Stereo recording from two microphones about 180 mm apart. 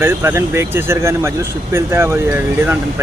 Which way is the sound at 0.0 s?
15° right (ahead or behind).